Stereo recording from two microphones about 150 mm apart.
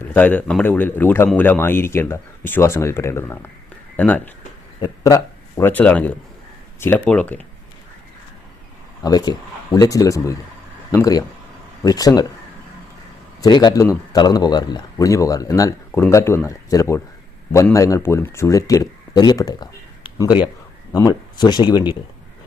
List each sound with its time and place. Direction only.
0.0 s speech: 10° left (ahead or behind)
4.8 s speech: 25° left (ahead or behind)
9.0 s speech: 25° left (ahead or behind)
13.4 s speech: 30° left (ahead or behind)